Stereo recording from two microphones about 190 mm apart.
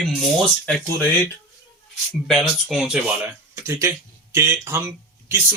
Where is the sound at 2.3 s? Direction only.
Centre (ahead or behind).